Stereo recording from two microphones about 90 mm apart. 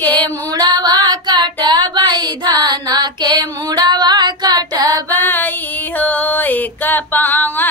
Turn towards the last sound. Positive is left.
turn(degrees=20)  # may be behind; listen again after turning